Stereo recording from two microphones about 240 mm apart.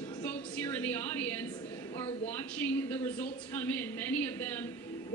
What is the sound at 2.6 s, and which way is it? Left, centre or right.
A woman's voice, centre.